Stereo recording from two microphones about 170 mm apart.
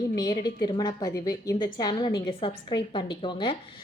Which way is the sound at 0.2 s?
25° left (ahead or behind).